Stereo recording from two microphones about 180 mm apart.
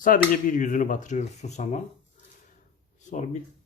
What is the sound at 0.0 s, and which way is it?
Speech, 50° left (ahead or behind).